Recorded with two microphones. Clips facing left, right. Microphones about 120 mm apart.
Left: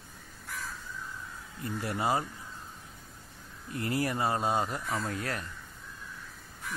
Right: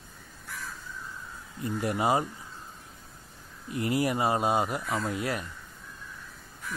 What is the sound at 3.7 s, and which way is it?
Speech, 15° right (ahead or behind).